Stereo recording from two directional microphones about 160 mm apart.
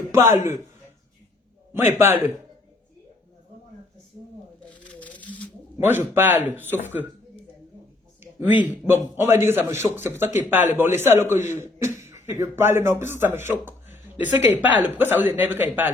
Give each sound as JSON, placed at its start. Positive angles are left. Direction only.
{"t": 0.3, "sound": "a man's voice", "side_deg": -15}
{"t": 1.7, "sound": "a man's voice", "side_deg": -15}
{"t": 4.7, "sound": "a sound", "side_deg": 10}
{"t": 5.8, "sound": "a man's voice", "side_deg": -15}
{"t": 8.2, "sound": "a sound", "side_deg": -10}
{"t": 9.1, "sound": "a man's voice", "side_deg": -15}